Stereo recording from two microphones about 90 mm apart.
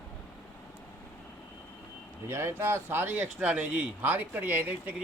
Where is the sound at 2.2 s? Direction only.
30° right (ahead or behind).